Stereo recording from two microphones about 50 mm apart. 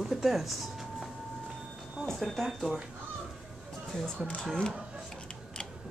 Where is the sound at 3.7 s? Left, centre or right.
Centre.